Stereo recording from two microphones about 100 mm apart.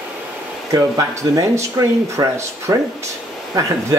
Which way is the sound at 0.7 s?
35° right (ahead or behind).